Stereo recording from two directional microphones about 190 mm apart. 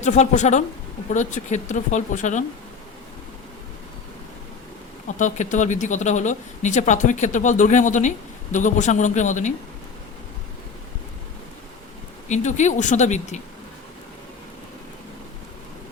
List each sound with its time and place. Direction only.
0.0 s speech: 40° left (ahead or behind)
5.0 s speech: 40° left (ahead or behind)
12.3 s speech: 40° left (ahead or behind)